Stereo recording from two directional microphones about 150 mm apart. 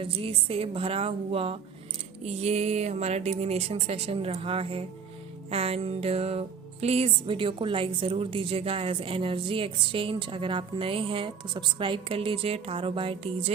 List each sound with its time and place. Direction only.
0.0 s a woman's voice: 35° right (ahead or behind)